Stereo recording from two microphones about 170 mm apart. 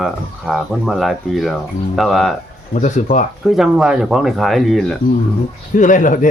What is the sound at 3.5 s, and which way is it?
Speech, centre (ahead or behind).